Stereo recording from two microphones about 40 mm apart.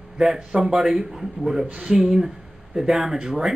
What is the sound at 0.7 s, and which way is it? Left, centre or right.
Speech, centre.